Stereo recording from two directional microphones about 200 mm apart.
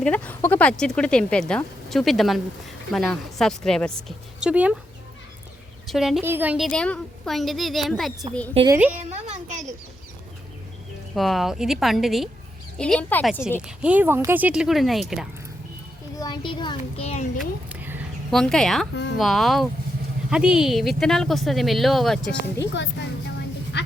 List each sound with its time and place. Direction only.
0.0 s speech: 5° left (ahead or behind)
5.9 s a woman's voice: centre (ahead or behind)
9.3 s speech: 35° right (ahead or behind)
11.1 s speech: centre (ahead or behind)
13.7 s speech: 5° right (ahead or behind)
16.1 s a child's voice: 20° left (ahead or behind)
17.1 s speech: 35° left (ahead or behind)
17.7 s a sound: 10° right (ahead or behind)
18.3 s speech: 5° left (ahead or behind)
22.7 s a sound: 60° left (ahead or behind)